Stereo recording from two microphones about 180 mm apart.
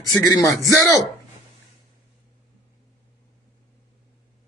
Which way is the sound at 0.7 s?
15° right (ahead or behind).